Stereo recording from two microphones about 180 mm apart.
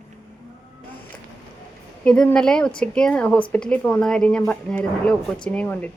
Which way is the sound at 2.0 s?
5° left (ahead or behind).